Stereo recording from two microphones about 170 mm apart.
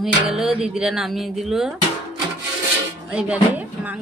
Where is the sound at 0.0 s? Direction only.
5° right (ahead or behind).